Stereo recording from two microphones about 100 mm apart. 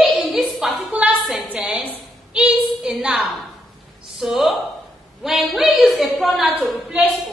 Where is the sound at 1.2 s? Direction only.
Centre (ahead or behind).